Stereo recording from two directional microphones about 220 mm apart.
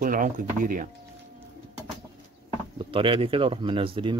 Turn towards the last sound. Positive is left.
turn(degrees=-25)  # may be behind; listen again after turning